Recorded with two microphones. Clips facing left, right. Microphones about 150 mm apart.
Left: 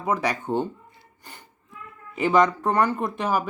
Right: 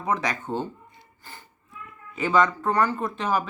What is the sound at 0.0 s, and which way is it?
Speech, 10° left (ahead or behind).